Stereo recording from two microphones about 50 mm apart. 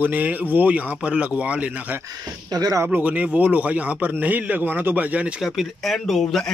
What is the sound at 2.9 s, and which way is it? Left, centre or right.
A man's voice, right.